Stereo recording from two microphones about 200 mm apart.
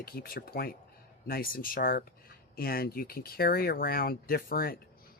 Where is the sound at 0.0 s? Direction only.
50° left (ahead or behind).